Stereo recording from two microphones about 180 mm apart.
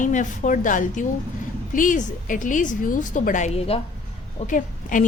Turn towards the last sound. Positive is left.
turn(degrees=45)  # may be behind; listen again after turning